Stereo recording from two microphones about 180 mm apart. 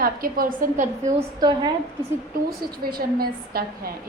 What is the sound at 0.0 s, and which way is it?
Speech, 55° right (ahead or behind).